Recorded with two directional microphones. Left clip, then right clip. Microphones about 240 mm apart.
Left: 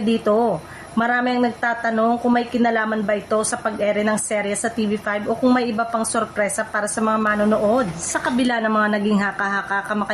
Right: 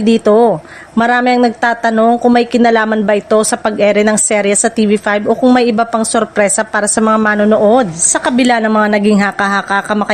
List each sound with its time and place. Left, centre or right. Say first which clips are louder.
0.0 s a woman's voice: right 10 dB; right